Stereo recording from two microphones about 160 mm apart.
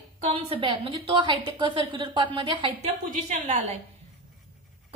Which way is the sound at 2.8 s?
50° right (ahead or behind).